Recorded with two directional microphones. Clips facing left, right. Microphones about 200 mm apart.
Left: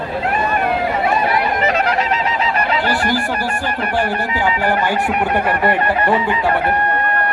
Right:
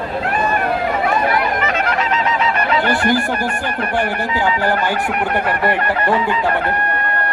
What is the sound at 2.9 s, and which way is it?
Music, 50° right (ahead or behind).